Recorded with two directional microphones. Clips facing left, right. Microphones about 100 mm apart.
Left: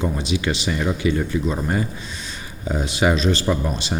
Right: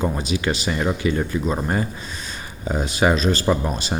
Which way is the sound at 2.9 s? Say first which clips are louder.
Even; 40° right (ahead or behind).